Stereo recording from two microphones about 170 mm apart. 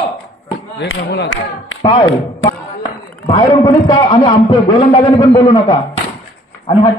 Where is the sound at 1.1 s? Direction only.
90° left.